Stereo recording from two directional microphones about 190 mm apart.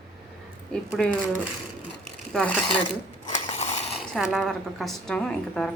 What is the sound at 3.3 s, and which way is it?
Mechanisms, 35° left (ahead or behind).